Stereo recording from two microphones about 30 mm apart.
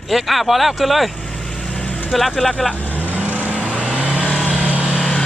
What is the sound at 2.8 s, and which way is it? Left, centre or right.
Vehicle, right.